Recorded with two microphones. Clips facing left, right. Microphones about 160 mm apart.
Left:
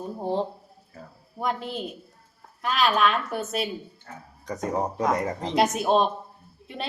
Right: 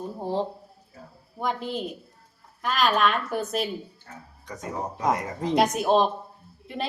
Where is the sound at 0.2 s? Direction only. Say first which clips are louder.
Left 1 dB; centre (ahead or behind).